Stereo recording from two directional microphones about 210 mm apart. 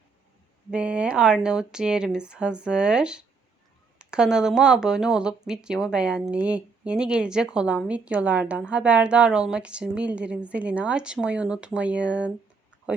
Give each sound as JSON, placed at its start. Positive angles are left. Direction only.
{"t": 0.7, "sound": "speech", "side_deg": -5}